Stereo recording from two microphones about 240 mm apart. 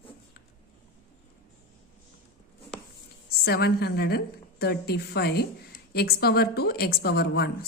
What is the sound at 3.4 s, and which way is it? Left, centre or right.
A woman's voice, left.